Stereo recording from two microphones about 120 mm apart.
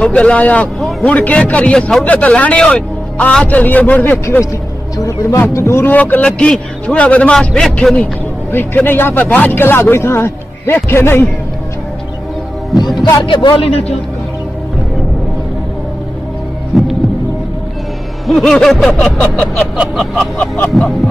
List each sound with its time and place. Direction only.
0.0 s a man's voice: 10° left (ahead or behind)
4.9 s a man's voice: 30° left (ahead or behind)
13.2 s a man's voice: 40° left (ahead or behind)
16.7 s heart sounds: centre (ahead or behind)
18.2 s music: centre (ahead or behind)
18.9 s a man's voice: 5° left (ahead or behind)
19.8 s music: centre (ahead or behind)